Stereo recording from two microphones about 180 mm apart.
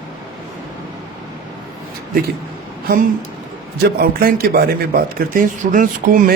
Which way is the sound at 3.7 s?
60° right (ahead or behind).